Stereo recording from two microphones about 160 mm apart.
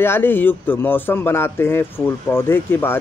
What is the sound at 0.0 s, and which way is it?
Speech, 15° left (ahead or behind).